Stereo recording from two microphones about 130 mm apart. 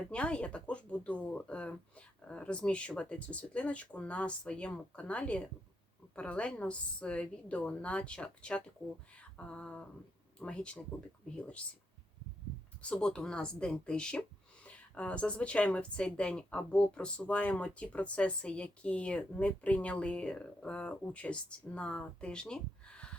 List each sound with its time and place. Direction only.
0.1 s speech: 10° left (ahead or behind)
9.1 s a sound: 10° left (ahead or behind)
10.4 s speech: 10° left (ahead or behind)
12.8 s speech: 5° left (ahead or behind)